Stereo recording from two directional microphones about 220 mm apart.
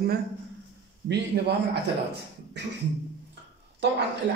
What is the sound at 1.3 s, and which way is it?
Speech, 55° right (ahead or behind).